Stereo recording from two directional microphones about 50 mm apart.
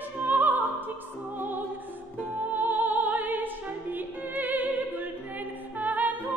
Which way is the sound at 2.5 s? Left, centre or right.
Right.